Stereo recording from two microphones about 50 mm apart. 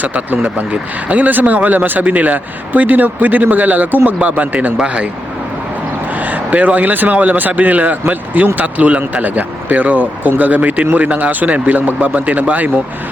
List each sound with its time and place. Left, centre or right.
0.0 s speech: right
6.1 s speech: right